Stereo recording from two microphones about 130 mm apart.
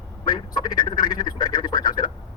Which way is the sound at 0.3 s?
35° left (ahead or behind).